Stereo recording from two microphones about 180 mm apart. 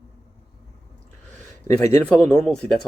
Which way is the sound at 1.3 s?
45° right (ahead or behind).